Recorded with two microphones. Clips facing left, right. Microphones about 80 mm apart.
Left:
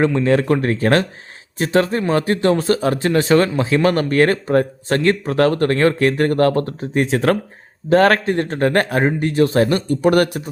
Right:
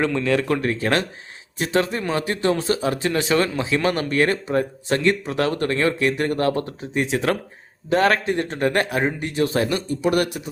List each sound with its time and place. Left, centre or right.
0.3 s a man's voice: left